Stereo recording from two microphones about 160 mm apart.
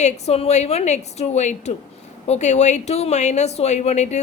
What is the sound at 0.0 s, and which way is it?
Speech, 40° left (ahead or behind).